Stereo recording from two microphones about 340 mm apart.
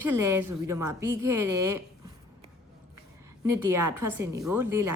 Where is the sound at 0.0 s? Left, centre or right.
Centre.